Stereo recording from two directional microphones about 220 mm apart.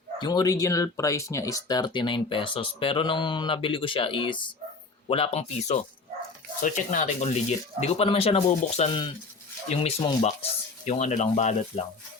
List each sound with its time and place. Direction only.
0.2 s speech: 20° left (ahead or behind)